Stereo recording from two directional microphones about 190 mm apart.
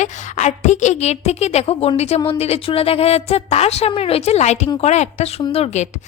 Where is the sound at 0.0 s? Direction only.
40° left (ahead or behind).